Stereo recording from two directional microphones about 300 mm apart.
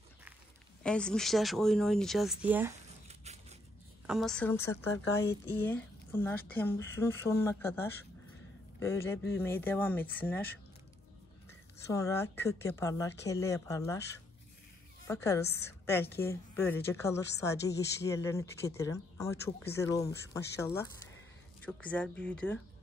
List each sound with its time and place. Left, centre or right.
0.8 s speech: centre
3.1 s a sound: right
4.1 s a woman's voice: centre
11.9 s a woman's voice: centre
15.0 s a woman's voice: centre